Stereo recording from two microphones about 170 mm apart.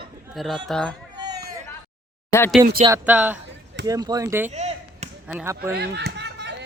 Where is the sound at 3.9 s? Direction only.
20° right (ahead or behind).